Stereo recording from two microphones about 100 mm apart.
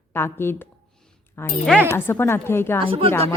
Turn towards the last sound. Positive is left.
turn(degrees=-65)  # may be behind; listen again after turning